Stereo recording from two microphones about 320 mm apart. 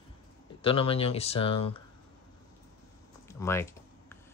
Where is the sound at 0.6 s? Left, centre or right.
Centre.